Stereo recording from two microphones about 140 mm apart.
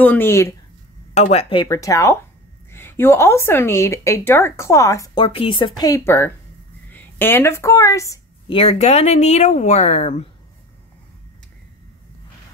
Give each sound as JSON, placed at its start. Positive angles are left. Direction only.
{"t": 0.0, "sound": "speech", "side_deg": 15}
{"t": 1.1, "sound": "speech", "side_deg": 50}
{"t": 1.7, "sound": "a woman's voice", "side_deg": 25}
{"t": 5.9, "sound": "a woman's voice", "side_deg": 20}
{"t": 8.5, "sound": "speech", "side_deg": 45}